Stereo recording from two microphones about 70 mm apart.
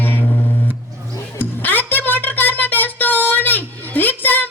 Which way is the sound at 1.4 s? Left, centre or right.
Left.